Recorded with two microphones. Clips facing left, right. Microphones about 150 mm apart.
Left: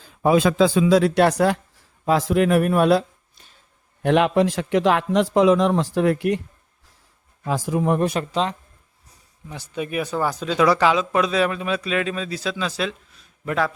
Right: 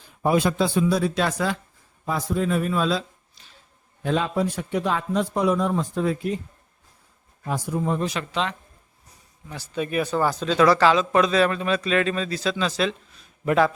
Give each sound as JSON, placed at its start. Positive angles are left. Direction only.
{"t": 0.8, "sound": "speech", "side_deg": 90}
{"t": 4.0, "sound": "a man's voice", "side_deg": 75}
{"t": 7.4, "sound": "speech", "side_deg": 90}
{"t": 8.2, "sound": "speech", "side_deg": 35}
{"t": 9.5, "sound": "speech", "side_deg": 15}
{"t": 13.4, "sound": "speech", "side_deg": -10}